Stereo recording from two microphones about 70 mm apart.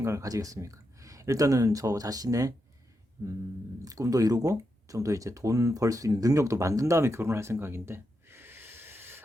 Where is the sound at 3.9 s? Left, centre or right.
Right.